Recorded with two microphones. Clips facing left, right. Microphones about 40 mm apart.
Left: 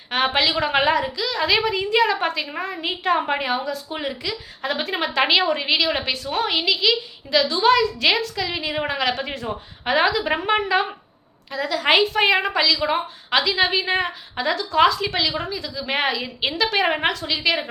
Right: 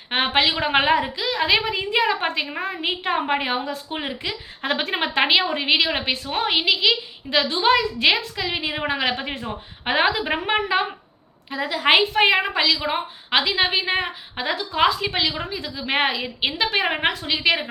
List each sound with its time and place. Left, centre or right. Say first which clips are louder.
0.3 s a woman's voice: right 2 dB; right
4.6 s speech: right 1 dB; right
5.2 s a woman's voice: left 1 dB; centre
10.2 s a woman's voice: left 1 dB; centre